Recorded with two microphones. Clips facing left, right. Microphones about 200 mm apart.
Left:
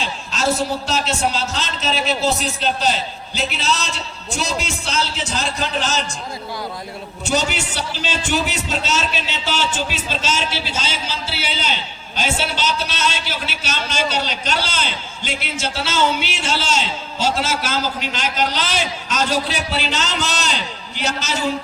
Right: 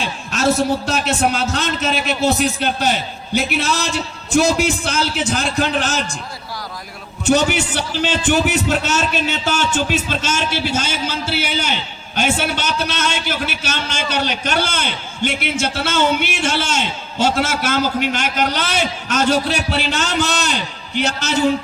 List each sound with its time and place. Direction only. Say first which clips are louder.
0.0 s a sound: right 3 dB; 55° right (ahead or behind)
0.9 s a man's voice: right 3 dB; 55° right (ahead or behind)
7.3 s a man's voice: right 6 dB; 50° right (ahead or behind)